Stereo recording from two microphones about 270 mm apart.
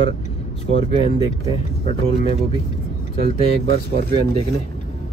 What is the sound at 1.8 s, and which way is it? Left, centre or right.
Speech, left.